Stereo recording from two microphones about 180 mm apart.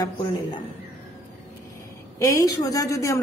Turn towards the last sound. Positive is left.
turn(degrees=15)  # may be behind; listen again after turning